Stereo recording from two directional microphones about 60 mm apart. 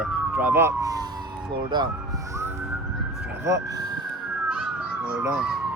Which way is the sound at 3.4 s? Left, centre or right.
Right.